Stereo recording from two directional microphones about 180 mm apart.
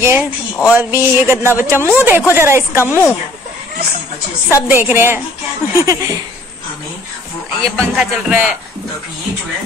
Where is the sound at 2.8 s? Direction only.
15° left (ahead or behind).